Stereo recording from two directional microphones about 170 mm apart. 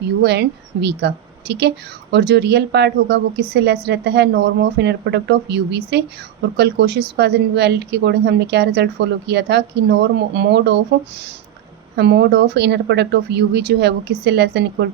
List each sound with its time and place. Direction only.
0.2 s a woman's voice: 80° right
11.9 s a woman's voice: 80° right